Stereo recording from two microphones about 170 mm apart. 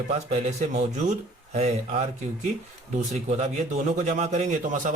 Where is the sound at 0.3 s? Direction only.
40° right (ahead or behind).